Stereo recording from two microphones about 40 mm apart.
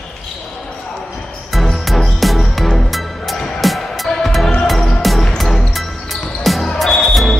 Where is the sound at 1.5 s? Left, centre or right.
Centre.